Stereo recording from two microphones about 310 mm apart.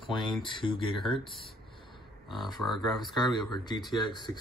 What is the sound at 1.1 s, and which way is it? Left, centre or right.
Speech, centre.